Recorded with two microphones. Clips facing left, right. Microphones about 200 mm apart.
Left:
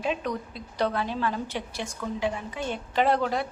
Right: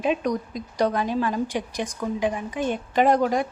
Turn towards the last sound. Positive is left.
turn(degrees=-15)  # may be behind; listen again after turning